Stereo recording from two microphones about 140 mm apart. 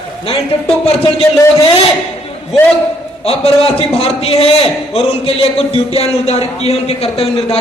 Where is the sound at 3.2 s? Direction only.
45° left (ahead or behind).